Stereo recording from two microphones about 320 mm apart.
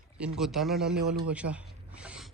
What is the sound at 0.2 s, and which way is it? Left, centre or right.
A man's voice, centre.